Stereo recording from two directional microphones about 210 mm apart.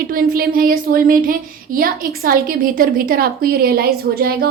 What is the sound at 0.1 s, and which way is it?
Speech, 45° right (ahead or behind).